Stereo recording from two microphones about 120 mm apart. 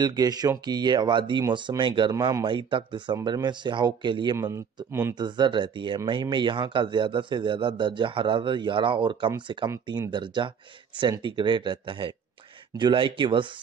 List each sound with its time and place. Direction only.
0.0 s speech: 35° right (ahead or behind)
4.4 s a man's voice: 25° right (ahead or behind)
5.1 s speech: 40° right (ahead or behind)